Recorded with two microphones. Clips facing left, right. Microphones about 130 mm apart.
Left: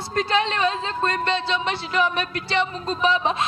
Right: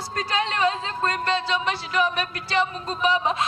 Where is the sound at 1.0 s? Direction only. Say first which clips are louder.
Left 1 dB; 25° left (ahead or behind).